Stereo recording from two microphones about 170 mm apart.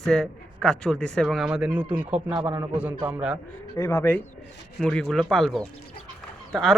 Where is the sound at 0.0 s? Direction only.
5° left (ahead or behind).